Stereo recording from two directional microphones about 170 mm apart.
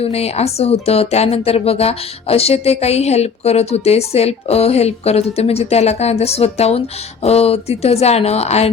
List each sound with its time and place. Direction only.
0.0 s speech: 35° left (ahead or behind)